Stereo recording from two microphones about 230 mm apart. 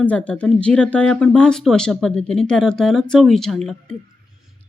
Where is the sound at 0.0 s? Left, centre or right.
Centre.